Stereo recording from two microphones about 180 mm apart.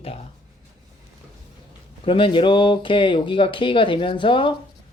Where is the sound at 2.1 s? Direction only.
30° left (ahead or behind).